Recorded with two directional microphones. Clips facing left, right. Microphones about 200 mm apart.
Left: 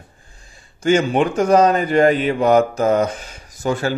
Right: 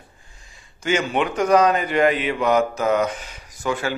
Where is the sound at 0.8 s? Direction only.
45° left (ahead or behind).